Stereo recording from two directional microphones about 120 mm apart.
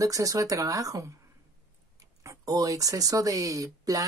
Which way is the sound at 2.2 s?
30° right (ahead or behind).